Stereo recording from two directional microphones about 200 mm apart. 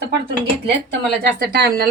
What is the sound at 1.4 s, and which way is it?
Speech, 50° right (ahead or behind).